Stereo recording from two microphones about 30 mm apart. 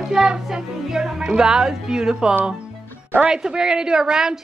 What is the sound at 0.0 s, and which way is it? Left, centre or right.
Music, centre.